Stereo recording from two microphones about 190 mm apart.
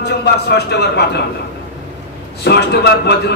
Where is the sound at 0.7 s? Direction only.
60° left (ahead or behind).